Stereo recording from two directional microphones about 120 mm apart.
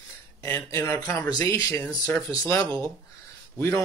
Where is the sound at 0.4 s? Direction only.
20° left (ahead or behind).